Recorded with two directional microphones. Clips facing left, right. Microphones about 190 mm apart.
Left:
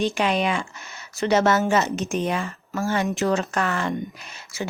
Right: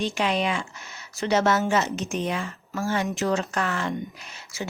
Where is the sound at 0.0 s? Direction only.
55° left (ahead or behind).